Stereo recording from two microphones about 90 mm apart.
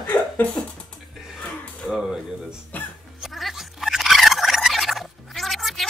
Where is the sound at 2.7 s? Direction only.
15° left (ahead or behind).